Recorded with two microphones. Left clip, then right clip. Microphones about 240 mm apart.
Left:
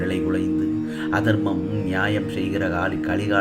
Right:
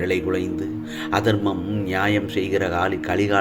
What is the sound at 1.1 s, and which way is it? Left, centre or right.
Speech, right.